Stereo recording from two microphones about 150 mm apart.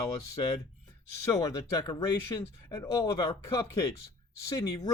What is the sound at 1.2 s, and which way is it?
Speech, 20° left (ahead or behind).